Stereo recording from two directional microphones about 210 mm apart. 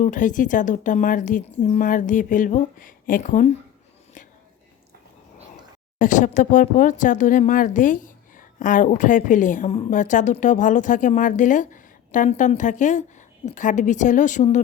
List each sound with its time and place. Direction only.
0.0 s speech: 40° left (ahead or behind)
6.0 s speech: 35° left (ahead or behind)